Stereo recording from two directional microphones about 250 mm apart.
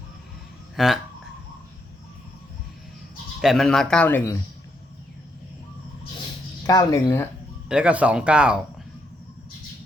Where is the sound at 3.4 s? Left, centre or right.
Centre.